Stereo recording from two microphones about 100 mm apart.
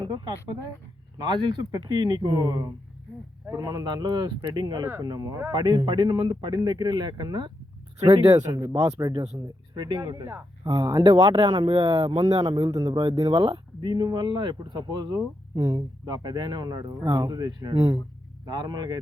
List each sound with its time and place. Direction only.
0.0 s speech: 45° right (ahead or behind)
8.0 s speech: 75° right (ahead or behind)
8.5 s speech: 35° right (ahead or behind)
11.0 s speech: 55° right (ahead or behind)
12.2 s speech: 45° right (ahead or behind)